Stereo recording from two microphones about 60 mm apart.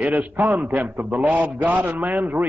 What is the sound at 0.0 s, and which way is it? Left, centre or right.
Speech, right.